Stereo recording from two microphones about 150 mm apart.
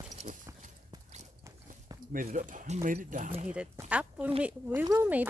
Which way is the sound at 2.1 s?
60° right (ahead or behind).